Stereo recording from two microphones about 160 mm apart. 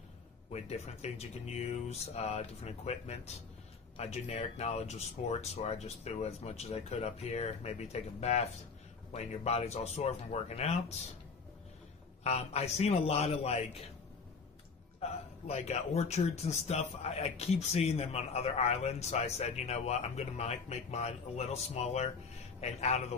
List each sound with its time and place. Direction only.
0.5 s speech: 40° left (ahead or behind)
12.2 s speech: 40° left (ahead or behind)
15.0 s speech: 40° left (ahead or behind)